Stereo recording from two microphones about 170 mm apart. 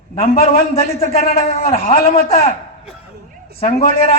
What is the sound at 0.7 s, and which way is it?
A man's voice, 35° left (ahead or behind).